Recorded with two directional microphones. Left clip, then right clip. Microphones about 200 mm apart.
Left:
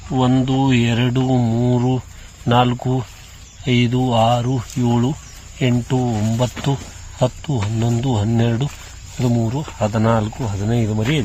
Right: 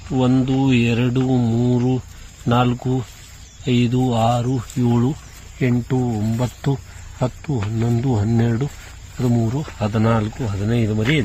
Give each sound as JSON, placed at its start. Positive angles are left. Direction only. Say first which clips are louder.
{"t": 0.2, "sound": "speech", "louder": "left 1 dB", "side_deg": 10}